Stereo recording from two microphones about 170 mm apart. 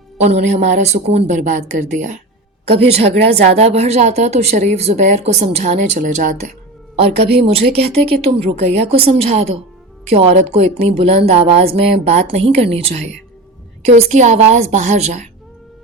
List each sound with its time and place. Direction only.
0.2 s a woman's voice: 40° right (ahead or behind)
6.9 s a woman's voice: 40° right (ahead or behind)